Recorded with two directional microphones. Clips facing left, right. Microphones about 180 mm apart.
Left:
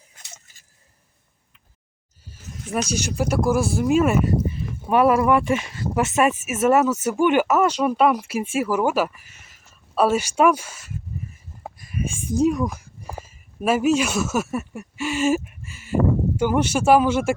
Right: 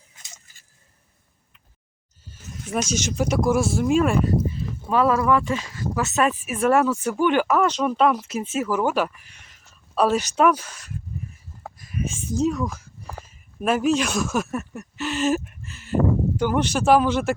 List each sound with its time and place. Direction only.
2.7 s speech: 5° left (ahead or behind)
4.9 s speech: 15° left (ahead or behind)
6.1 s speech: 10° left (ahead or behind)
11.6 s a sound: 10° left (ahead or behind)
16.4 s speech: 10° left (ahead or behind)